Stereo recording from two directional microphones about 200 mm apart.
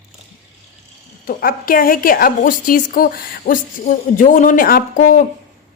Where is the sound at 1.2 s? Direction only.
45° left (ahead or behind).